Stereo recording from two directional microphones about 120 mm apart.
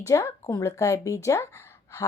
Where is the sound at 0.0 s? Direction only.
25° left (ahead or behind).